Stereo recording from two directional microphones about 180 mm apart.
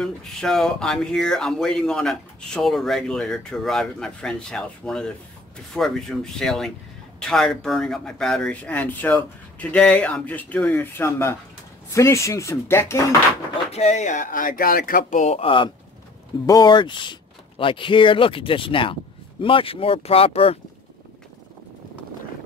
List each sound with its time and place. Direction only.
0.0 s speech: centre (ahead or behind)
13.7 s speech: 35° left (ahead or behind)